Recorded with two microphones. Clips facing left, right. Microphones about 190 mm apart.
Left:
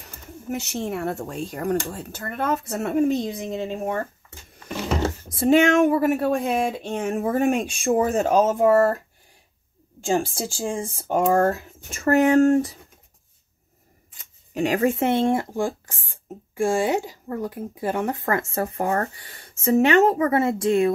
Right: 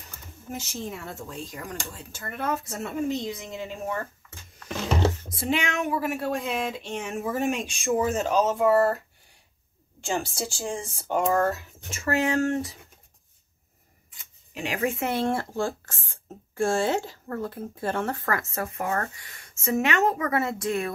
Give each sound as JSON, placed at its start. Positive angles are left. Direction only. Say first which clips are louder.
{"t": 0.5, "sound": "speech", "louder": "left 7 dB", "side_deg": 70}
{"t": 5.3, "sound": "speech", "louder": "left 11 dB", "side_deg": 45}
{"t": 10.0, "sound": "speech", "louder": "left 6 dB", "side_deg": 45}
{"t": 14.5, "sound": "speech", "louder": "left 7 dB", "side_deg": 45}
{"t": 15.0, "sound": "speech", "louder": "left 6 dB", "side_deg": 20}